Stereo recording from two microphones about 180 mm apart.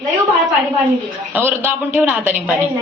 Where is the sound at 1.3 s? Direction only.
10° right (ahead or behind).